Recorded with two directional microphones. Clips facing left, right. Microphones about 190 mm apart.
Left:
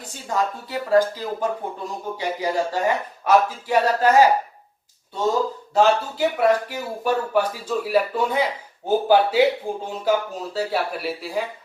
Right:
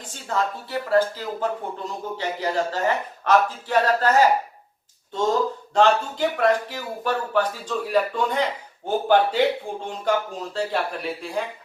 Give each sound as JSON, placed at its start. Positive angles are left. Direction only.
{"t": 0.0, "sound": "speech", "side_deg": 10}
{"t": 5.7, "sound": "speech", "side_deg": 5}